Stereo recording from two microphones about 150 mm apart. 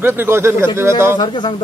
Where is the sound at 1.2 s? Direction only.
30° left (ahead or behind).